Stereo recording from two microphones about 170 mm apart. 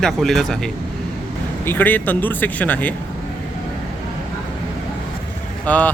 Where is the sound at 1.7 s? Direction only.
10° left (ahead or behind).